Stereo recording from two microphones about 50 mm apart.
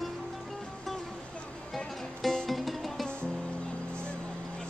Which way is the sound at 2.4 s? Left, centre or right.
Centre.